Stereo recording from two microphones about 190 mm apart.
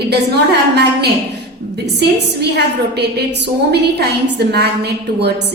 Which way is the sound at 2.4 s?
60° right (ahead or behind).